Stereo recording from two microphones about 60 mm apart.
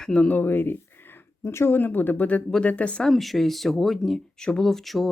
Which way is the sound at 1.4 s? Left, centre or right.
Left.